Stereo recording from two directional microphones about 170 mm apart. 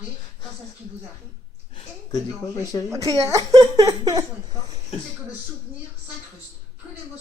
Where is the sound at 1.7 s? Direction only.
25° left (ahead or behind).